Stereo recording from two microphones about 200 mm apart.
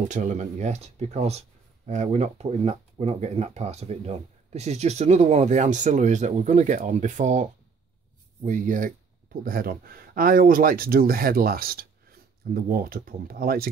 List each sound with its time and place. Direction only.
0.1 s speech: 35° right (ahead or behind)
8.5 s speech: 40° right (ahead or behind)